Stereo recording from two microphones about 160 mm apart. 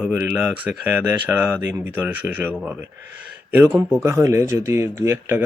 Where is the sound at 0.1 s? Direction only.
10° right (ahead or behind).